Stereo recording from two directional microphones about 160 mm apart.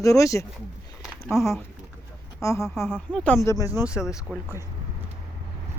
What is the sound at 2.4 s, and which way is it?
Speech, 20° left (ahead or behind).